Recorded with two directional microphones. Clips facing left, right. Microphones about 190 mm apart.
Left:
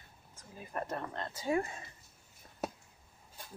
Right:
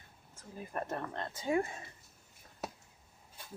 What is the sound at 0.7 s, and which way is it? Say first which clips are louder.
Speech: even; 25° right (ahead or behind).